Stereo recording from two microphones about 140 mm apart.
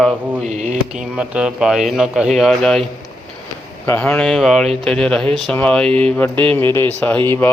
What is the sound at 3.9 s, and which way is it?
Speech, 10° left (ahead or behind).